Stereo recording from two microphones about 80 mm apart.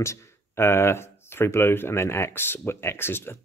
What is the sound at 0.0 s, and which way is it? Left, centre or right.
Speech, left.